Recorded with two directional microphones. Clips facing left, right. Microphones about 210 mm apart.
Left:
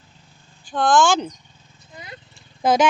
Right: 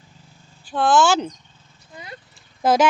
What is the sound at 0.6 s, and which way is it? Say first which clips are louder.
Speech: even; 5° right (ahead or behind).